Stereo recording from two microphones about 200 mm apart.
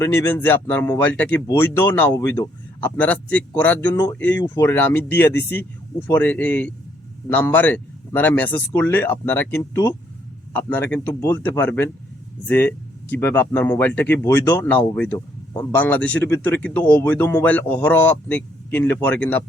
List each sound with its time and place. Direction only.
0.0 s speech: 15° left (ahead or behind)
5.4 s speech: 55° left (ahead or behind)
6.1 s speech: 10° left (ahead or behind)